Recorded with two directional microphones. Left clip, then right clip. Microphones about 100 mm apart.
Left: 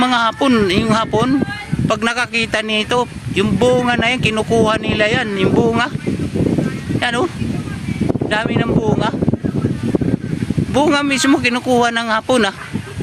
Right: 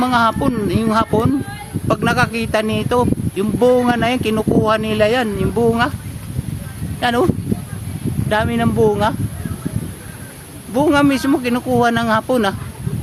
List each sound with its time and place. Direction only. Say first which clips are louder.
0.0 s speech: left 1 dB; 25° left (ahead or behind)
7.0 s speech: right 2 dB; 25° left (ahead or behind)
8.3 s speech: right 2 dB; 30° left (ahead or behind)
10.8 s speech: even; 35° left (ahead or behind)